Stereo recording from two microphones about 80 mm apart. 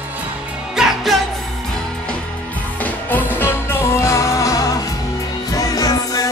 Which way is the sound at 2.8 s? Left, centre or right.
Left.